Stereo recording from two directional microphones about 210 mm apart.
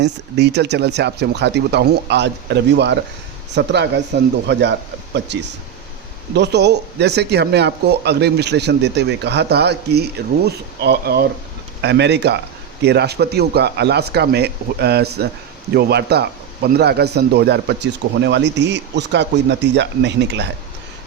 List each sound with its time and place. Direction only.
0.0 s speech: 55° right (ahead or behind)